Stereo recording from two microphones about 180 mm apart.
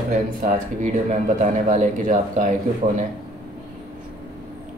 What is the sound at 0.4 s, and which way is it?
Speech, 45° right (ahead or behind).